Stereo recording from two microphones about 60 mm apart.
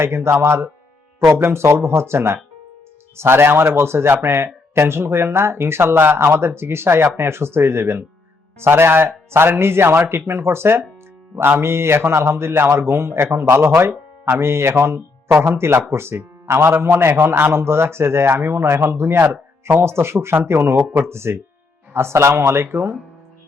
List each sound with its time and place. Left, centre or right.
0.0 s a man's voice: right